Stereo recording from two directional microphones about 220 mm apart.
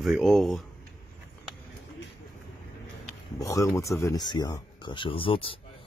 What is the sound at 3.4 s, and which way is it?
Speech, 15° left (ahead or behind).